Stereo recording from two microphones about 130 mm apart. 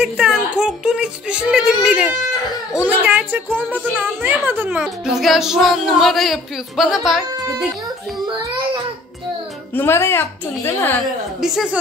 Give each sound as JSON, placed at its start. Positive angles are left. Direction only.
{"t": 0.0, "sound": "a child's voice", "side_deg": -5}
{"t": 9.8, "sound": "a woman's voice", "side_deg": 20}
{"t": 11.4, "sound": "a child's voice", "side_deg": 0}